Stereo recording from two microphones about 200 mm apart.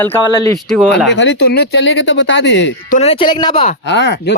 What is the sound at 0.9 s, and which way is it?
Speech, 60° left (ahead or behind).